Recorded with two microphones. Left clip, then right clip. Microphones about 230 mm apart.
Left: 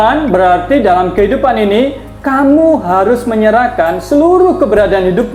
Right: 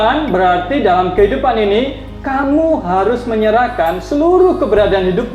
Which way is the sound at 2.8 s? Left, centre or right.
Left.